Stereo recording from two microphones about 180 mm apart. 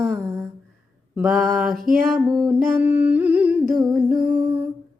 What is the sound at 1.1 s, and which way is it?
Mantra, 5° right (ahead or behind).